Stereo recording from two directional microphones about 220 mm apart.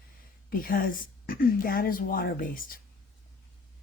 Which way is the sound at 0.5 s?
40° left (ahead or behind).